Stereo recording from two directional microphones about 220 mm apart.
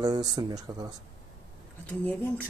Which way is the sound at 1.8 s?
10° left (ahead or behind).